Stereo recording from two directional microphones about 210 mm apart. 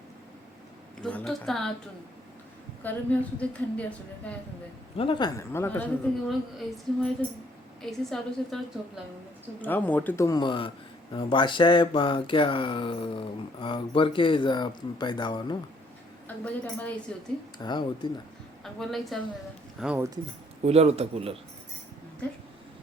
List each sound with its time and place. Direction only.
1.0 s a woman's voice: 5° left (ahead or behind)
2.8 s a woman's voice: 5° left (ahead or behind)
4.9 s a woman's voice: 25° left (ahead or behind); by 6.3 s 10° left (ahead or behind)
7.8 s a woman's voice: centre (ahead or behind)
9.6 s a woman's voice: 10° left (ahead or behind)
16.2 s a woman's voice: 5° left (ahead or behind)
17.6 s speech: 20° left (ahead or behind)
18.6 s a woman's voice: centre (ahead or behind)
20.7 s a man's voice: 30° right (ahead or behind)